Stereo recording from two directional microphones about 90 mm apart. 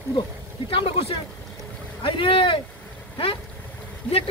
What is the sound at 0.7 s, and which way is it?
Speech, 90° left.